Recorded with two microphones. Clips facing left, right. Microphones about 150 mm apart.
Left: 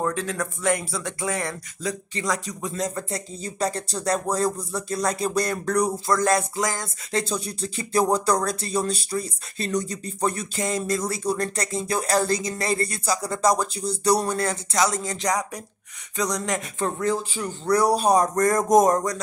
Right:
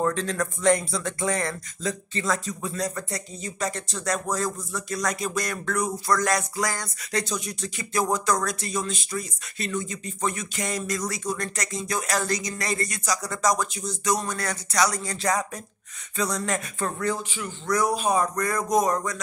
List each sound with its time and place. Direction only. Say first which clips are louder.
0.0 s speech: right 1 dB; 10° left (ahead or behind)
2.7 s speech: left 3 dB; 25° left (ahead or behind)
6.0 s a sound: left 3 dB; 25° left (ahead or behind)
16.2 s speech: left 1 dB; 15° left (ahead or behind)
17.3 s speech: left 4 dB; 40° left (ahead or behind)